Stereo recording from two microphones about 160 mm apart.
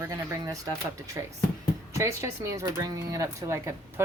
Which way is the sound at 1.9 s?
20° right (ahead or behind).